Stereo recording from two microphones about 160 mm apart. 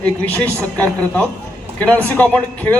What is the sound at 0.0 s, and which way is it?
A man's voice, 10° left (ahead or behind).